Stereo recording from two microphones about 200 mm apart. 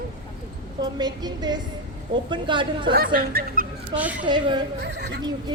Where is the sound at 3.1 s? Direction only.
45° right (ahead or behind).